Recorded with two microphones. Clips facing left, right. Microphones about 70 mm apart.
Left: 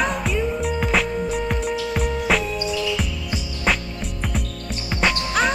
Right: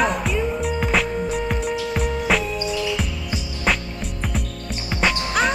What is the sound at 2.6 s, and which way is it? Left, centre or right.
Music, centre.